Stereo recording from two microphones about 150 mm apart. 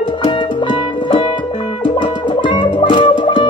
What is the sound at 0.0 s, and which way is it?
Music, 30° left (ahead or behind).